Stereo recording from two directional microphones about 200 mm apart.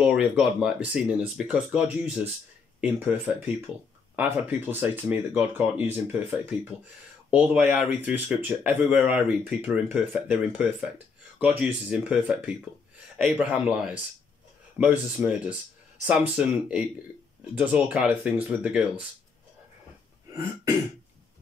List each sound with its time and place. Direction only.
0.1 s speech: 5° right (ahead or behind)